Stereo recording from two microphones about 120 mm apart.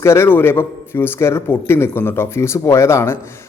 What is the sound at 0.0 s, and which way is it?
A man's voice, 20° left (ahead or behind).